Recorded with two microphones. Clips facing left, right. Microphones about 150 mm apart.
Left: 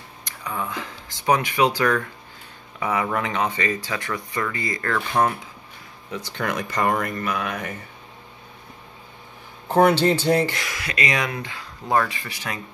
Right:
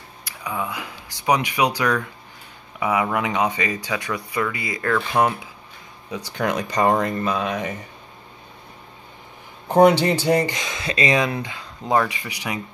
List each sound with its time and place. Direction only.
0.2 s speech: 10° right (ahead or behind)
9.7 s speech: 15° right (ahead or behind)